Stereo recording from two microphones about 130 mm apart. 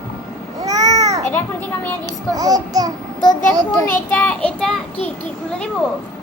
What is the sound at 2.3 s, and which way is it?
Speech, 30° right (ahead or behind).